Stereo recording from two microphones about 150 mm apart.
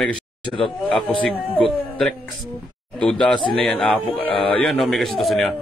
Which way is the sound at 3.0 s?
5° left (ahead or behind).